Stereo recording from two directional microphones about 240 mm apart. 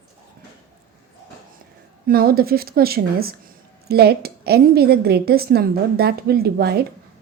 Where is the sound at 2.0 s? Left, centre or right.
Right.